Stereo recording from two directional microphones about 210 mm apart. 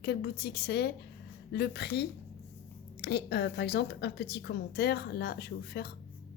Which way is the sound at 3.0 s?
50° left (ahead or behind).